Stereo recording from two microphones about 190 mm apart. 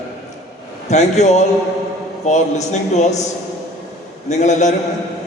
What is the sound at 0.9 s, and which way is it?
Speech, 35° left (ahead or behind).